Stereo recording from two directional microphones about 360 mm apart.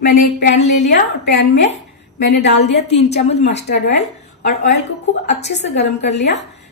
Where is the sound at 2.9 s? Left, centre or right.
Centre.